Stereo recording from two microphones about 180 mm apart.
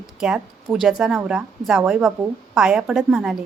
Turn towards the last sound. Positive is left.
turn(degrees=-5)  # may be behind; listen again after turning